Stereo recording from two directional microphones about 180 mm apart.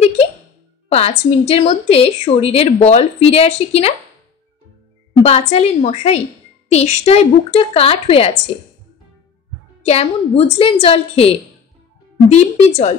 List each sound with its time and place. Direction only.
0.9 s a woman's voice: 35° left (ahead or behind)
5.2 s a woman's voice: 35° left (ahead or behind)
9.8 s a woman's voice: 35° left (ahead or behind)